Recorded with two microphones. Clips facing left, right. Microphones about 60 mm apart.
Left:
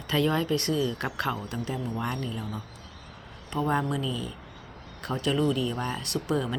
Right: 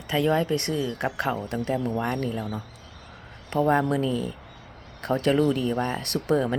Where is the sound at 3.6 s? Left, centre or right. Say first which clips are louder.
Right 5 dB; right.